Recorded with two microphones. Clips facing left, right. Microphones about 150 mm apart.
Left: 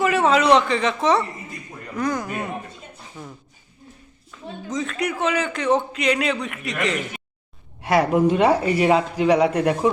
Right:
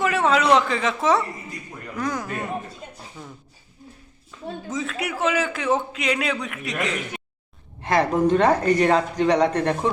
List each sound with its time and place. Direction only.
0.0 s a man's voice: centre (ahead or behind)
3.2 s a sound: 5° left (ahead or behind)
4.7 s a man's voice: 5° right (ahead or behind)
7.8 s speech: 10° left (ahead or behind)